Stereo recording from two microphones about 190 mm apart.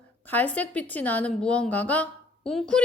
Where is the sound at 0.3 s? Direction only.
10° left (ahead or behind).